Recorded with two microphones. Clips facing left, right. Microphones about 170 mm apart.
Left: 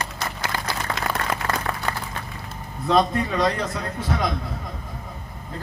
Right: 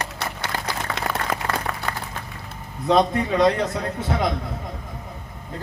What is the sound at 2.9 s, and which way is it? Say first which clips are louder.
A man's voice: right 2 dB; 20° right (ahead or behind).